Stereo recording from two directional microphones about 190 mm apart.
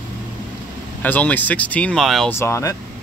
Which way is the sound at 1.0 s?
10° left (ahead or behind).